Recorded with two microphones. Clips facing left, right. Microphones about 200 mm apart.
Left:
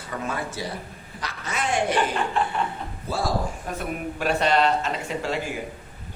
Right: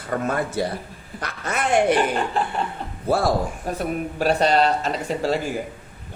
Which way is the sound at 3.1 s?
60° right (ahead or behind).